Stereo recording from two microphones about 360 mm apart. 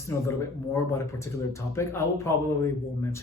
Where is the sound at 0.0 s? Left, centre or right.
Centre.